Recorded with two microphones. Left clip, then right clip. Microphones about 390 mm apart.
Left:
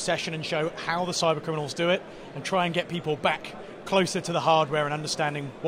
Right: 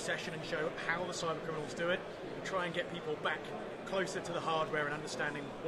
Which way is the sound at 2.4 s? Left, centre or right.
Left.